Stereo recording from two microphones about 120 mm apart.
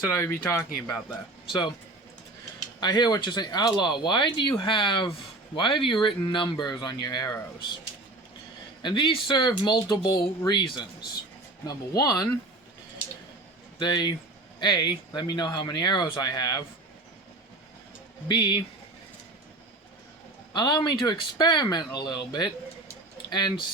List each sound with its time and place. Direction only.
0.1 s speech: 20° left (ahead or behind)
2.8 s speech: 35° left (ahead or behind)
8.8 s speech: 40° left (ahead or behind)
13.7 s speech: 35° left (ahead or behind)
18.3 s speech: 40° left (ahead or behind)
20.5 s speech: 35° left (ahead or behind)